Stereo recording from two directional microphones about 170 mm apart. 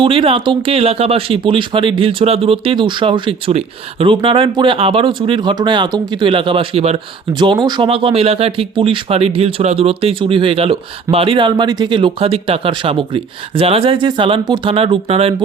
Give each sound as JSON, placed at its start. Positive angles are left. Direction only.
{"t": 0.0, "sound": "speech", "side_deg": -30}